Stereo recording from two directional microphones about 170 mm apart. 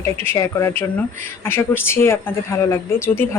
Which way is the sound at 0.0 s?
15° left (ahead or behind).